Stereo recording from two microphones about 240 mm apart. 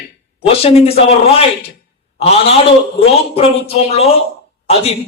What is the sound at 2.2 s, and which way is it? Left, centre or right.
A man's voice, left.